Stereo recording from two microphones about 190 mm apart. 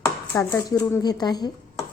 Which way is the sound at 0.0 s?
15° left (ahead or behind).